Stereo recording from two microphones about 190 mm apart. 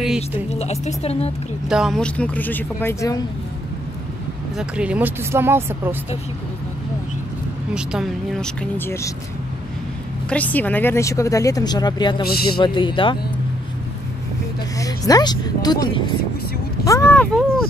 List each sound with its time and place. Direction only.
0.0 s a sound: 5° right (ahead or behind)
0.6 s a woman's voice: 35° left (ahead or behind)
1.7 s speech: centre (ahead or behind); by 3.3 s 15° left (ahead or behind)
4.6 s speech: 5° right (ahead or behind)
7.7 s a woman's voice: 5° right (ahead or behind)
8.7 s speech: 15° left (ahead or behind)
10.3 s speech: 10° left (ahead or behind); by 13.2 s 25° left (ahead or behind)
14.8 s speech: 20° left (ahead or behind)